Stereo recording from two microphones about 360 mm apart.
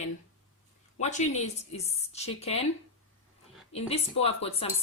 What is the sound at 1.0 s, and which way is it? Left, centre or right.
Speech, centre.